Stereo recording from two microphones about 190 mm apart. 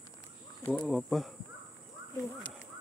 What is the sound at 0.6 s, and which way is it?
Speech, centre (ahead or behind).